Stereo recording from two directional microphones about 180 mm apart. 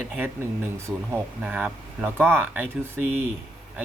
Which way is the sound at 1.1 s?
10° right (ahead or behind).